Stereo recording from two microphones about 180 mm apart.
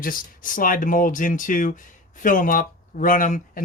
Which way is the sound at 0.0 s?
50° left (ahead or behind).